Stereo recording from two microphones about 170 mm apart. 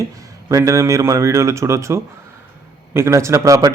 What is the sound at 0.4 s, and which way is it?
A man's voice, 15° right (ahead or behind).